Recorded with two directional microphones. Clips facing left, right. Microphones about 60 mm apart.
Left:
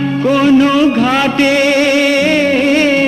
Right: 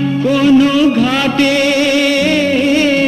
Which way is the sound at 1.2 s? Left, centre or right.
Left.